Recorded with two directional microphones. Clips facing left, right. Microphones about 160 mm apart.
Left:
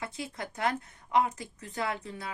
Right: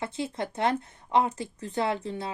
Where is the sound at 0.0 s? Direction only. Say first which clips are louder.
Right 6 dB; 25° right (ahead or behind).